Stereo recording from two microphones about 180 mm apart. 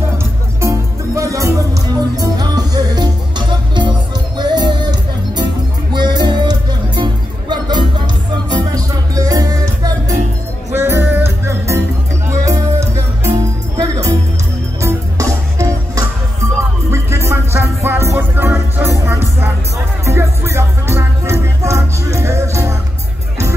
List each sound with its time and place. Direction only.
0.6 s music: 15° right (ahead or behind)
5.9 s music: 25° right (ahead or behind)